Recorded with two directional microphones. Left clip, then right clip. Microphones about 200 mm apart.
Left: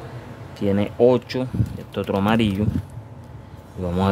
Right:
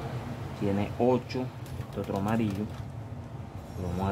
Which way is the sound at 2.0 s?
70° left (ahead or behind).